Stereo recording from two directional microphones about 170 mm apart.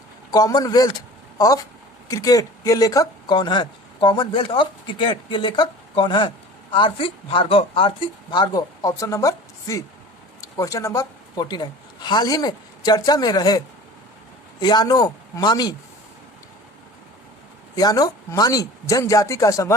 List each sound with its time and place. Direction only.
0.3 s a woman's voice: 20° left (ahead or behind)
14.6 s speech: 25° left (ahead or behind)
17.7 s speech: 20° left (ahead or behind)